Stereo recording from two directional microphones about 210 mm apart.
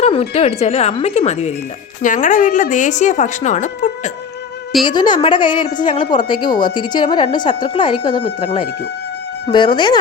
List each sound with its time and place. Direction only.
0.0 s a woman's voice: 30° left (ahead or behind)
4.9 s a woman's voice: 20° left (ahead or behind)